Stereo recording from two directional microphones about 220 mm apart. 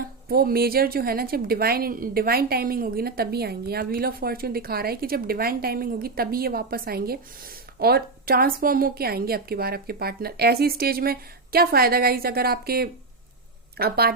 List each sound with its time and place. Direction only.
0.3 s a woman's voice: 45° right (ahead or behind)